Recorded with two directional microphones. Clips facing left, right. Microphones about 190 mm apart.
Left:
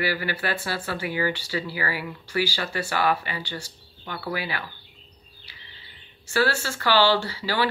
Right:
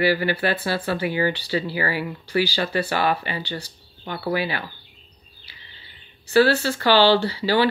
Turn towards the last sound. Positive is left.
turn(degrees=-25)  # may be behind; listen again after turning